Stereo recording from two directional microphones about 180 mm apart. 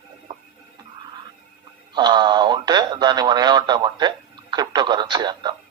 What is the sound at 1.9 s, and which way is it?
Speech, 25° right (ahead or behind).